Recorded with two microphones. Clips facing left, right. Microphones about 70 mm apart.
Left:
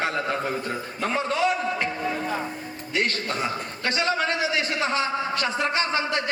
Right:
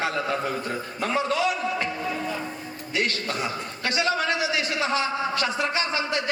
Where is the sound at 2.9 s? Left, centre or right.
Left.